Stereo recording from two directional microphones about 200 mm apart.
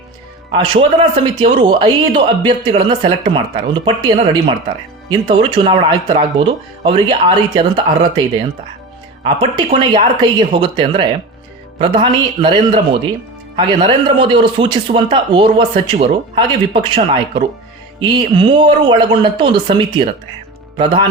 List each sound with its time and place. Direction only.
0.5 s a man's voice: 25° right (ahead or behind)
9.2 s a man's voice: 25° right (ahead or behind)